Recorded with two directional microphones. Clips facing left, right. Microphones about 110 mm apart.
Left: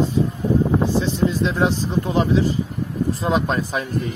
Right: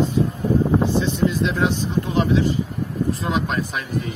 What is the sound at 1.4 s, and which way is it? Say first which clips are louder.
Speech: left 1 dB; 35° left (ahead or behind).